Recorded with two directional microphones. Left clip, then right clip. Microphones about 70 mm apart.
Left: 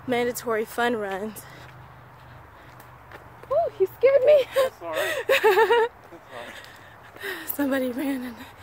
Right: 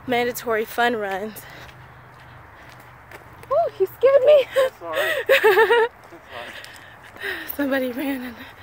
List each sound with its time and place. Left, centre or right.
0.1 s speech: left
3.5 s clip-clop: centre
4.4 s speech: left
4.8 s speech: left
5.3 s a sound: centre
5.6 s a sound: left
7.2 s speech: left
7.4 s speech: left
7.8 s speech: left